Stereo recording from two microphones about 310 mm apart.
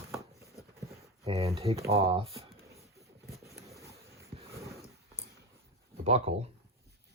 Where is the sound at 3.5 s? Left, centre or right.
Centre.